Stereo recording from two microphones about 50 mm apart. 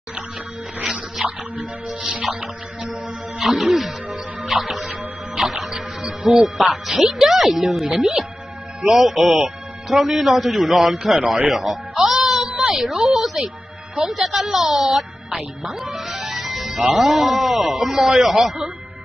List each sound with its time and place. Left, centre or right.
1.2 s music: centre
2.4 s music: centre
3.3 s speech: centre
4.5 s music: centre
6.4 s speech: centre
12.0 s a sound: centre
14.0 s speech: centre